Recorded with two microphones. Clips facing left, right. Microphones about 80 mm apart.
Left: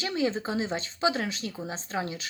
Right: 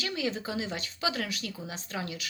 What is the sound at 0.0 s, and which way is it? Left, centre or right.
Speech, left.